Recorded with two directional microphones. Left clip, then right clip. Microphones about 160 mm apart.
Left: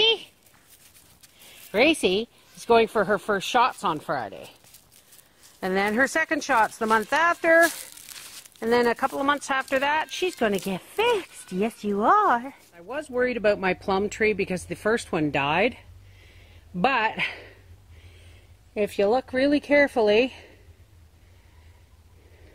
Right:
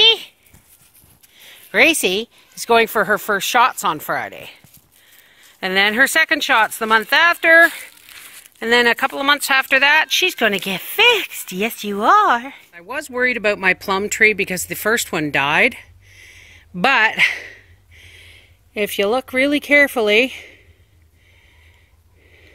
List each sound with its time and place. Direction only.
0.0 s a sound: 15° right (ahead or behind)
1.7 s speech: 15° right (ahead or behind)
5.6 s speech: 15° right (ahead or behind)
8.8 s speech: 25° right (ahead or behind)
18.8 s speech: 15° right (ahead or behind)